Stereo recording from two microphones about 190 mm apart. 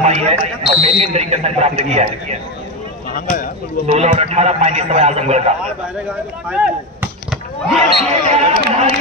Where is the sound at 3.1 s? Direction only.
45° left (ahead or behind).